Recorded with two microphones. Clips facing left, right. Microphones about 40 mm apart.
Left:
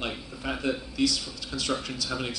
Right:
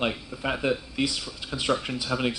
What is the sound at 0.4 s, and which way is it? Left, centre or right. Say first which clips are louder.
A man's voice: right 3 dB; right.